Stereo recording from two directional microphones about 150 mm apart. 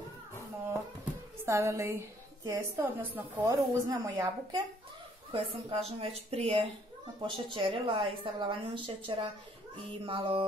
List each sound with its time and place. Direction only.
1.4 s a woman's voice: 20° right (ahead or behind)
3.9 s a woman's voice: 30° right (ahead or behind)
5.3 s a woman's voice: 40° right (ahead or behind)